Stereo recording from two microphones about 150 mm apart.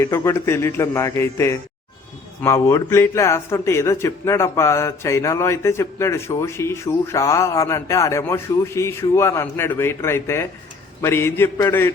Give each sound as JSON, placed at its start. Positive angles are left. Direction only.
{"t": 0.0, "sound": "a man's voice", "side_deg": 20}